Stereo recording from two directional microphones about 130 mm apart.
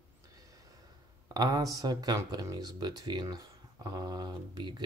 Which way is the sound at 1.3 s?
30° right (ahead or behind).